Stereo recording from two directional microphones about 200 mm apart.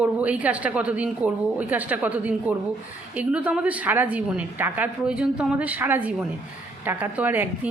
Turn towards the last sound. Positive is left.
turn(degrees=-10)  # may be behind; listen again after turning